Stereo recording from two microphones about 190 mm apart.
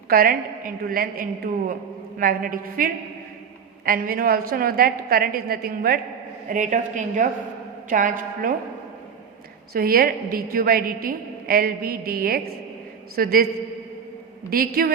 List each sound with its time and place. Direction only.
0.1 s a woman's voice: 50° right (ahead or behind)
9.7 s a woman's voice: 50° right (ahead or behind)
14.5 s a woman's voice: 50° right (ahead or behind)